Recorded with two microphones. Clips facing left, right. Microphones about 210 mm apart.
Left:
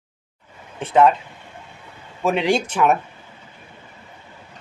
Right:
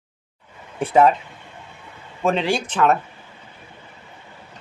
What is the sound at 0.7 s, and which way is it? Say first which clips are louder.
Speech: even; 5° right (ahead or behind).